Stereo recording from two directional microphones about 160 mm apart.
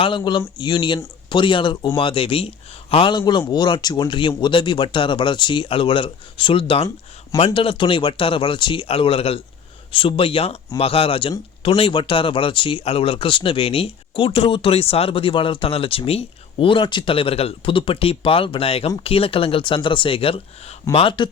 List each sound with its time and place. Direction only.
0.0 s speech: 30° left (ahead or behind)